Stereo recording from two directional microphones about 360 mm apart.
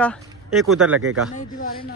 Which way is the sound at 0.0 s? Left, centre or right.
Centre.